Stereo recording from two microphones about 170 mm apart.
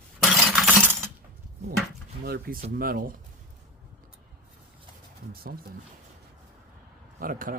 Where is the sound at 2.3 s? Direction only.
65° right (ahead or behind).